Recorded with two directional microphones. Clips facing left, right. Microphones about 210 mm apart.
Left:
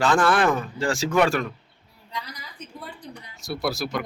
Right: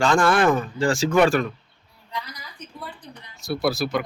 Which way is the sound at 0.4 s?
30° right (ahead or behind).